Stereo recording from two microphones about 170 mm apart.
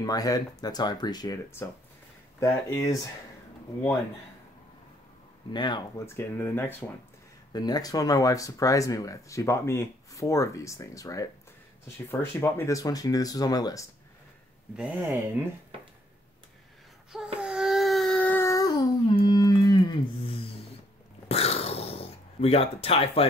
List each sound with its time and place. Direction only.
0.0 s speech: 20° left (ahead or behind)
5.5 s speech: 25° left (ahead or behind)
6.0 s speech: 15° left (ahead or behind)
7.5 s speech: 25° left (ahead or behind)
14.8 s speech: 10° right (ahead or behind)
17.1 s a sound: 5° right (ahead or behind); by 18.9 s 20° left (ahead or behind)
19.0 s music: 30° left (ahead or behind)
21.3 s a sound: 35° left (ahead or behind)